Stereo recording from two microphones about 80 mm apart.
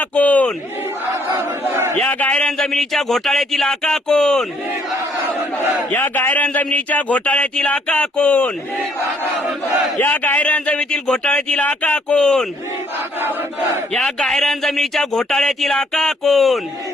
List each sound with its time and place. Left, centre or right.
0.0 s a sound: centre
1.0 s battle cry: right
2.0 s speech: left
5.5 s battle cry: left
6.7 s speech: centre
10.0 s speech: left
13.9 s speech: centre